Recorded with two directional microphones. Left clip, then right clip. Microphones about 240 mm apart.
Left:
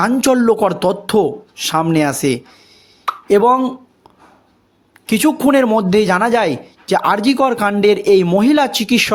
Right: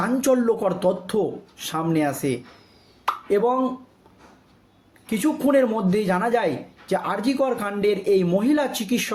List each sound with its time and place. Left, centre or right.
0.0 s speech: left
5.0 s speech: left